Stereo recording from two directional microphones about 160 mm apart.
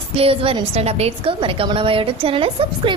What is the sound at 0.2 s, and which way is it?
A woman's voice, 35° right (ahead or behind).